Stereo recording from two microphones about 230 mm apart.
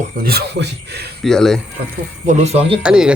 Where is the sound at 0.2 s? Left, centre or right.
Right.